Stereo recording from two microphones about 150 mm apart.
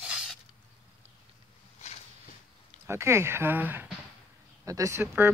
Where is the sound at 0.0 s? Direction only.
5° right (ahead or behind).